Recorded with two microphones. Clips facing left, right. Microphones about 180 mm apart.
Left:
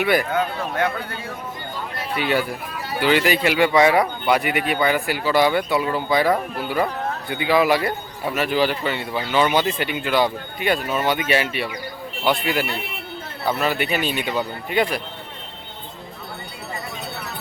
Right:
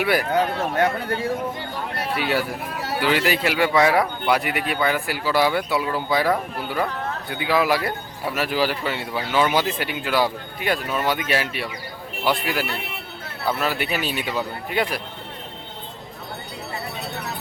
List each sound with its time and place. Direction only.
0.0 s a man's voice: 5° right (ahead or behind)
0.8 s speech: 40° right (ahead or behind)
2.1 s a man's voice: centre (ahead or behind)